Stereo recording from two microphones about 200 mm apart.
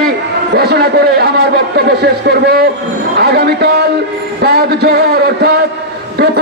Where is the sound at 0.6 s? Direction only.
50° right (ahead or behind).